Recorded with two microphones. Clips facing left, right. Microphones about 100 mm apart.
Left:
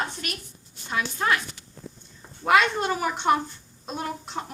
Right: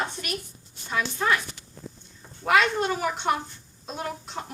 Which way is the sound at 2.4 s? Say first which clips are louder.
Left 1 dB; 30° left (ahead or behind).